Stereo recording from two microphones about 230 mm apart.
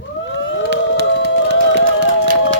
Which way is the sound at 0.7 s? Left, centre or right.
Right.